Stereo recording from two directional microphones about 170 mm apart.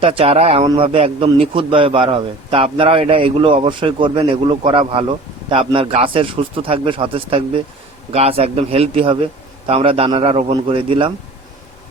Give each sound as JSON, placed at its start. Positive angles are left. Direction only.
{"t": 0.0, "sound": "speech", "side_deg": -35}